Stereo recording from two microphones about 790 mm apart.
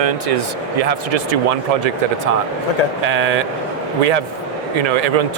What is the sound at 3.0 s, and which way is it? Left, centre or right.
Speech, right.